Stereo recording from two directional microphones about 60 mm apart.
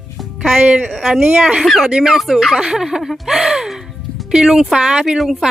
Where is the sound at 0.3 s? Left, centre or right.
Centre.